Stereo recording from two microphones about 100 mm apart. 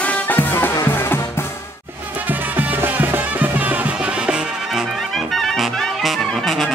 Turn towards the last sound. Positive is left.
turn(degrees=0)  # may be behind; listen again after turning